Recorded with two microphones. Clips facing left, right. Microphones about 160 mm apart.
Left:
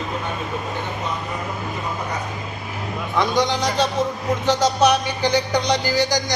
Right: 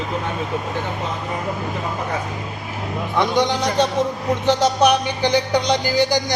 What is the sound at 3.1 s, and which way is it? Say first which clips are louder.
A man's voice: right 1 dB; 20° right (ahead or behind).